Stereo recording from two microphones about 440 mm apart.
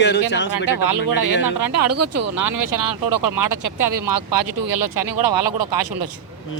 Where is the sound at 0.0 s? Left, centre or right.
Left.